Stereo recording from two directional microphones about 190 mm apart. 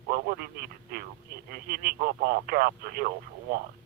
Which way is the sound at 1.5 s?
55° right (ahead or behind).